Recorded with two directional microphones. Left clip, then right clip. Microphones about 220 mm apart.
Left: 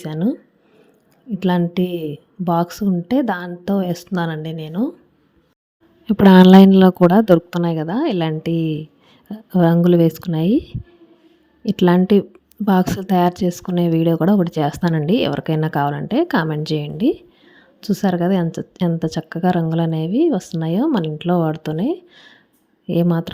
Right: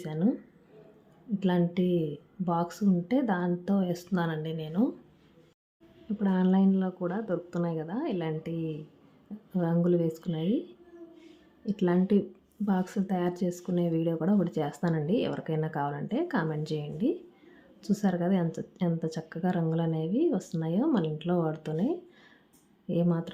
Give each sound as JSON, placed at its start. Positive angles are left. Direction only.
{"t": 0.0, "sound": "a woman's voice", "side_deg": 40}
{"t": 1.4, "sound": "a woman's voice", "side_deg": 40}
{"t": 6.1, "sound": "a woman's voice", "side_deg": 50}
{"t": 11.6, "sound": "a woman's voice", "side_deg": 40}